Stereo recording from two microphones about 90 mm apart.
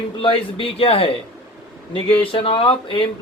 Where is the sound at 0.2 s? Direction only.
80° left.